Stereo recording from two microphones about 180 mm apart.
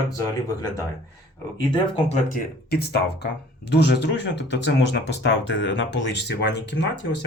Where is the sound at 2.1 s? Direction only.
50° left (ahead or behind); by 7.2 s 75° left (ahead or behind).